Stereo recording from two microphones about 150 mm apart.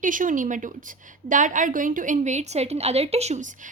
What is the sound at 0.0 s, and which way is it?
A woman's voice, 60° right (ahead or behind).